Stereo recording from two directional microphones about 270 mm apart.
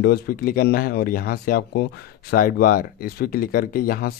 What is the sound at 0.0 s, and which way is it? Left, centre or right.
Speech, left.